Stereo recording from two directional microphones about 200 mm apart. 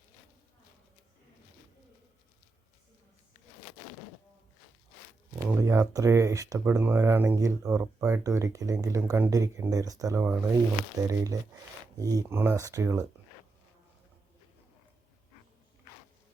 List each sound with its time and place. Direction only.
5.4 s speech: 15° right (ahead or behind)